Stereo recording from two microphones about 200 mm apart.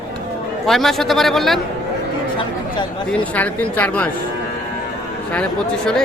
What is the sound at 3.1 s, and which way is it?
Speech, 5° left (ahead or behind).